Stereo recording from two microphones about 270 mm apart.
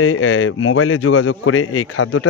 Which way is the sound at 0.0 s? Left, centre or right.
Left.